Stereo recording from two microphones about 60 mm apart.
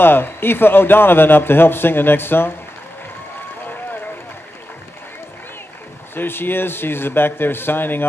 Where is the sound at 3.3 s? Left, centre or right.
Left.